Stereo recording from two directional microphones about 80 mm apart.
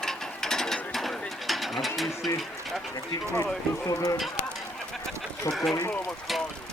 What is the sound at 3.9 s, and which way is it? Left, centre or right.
Speech, left.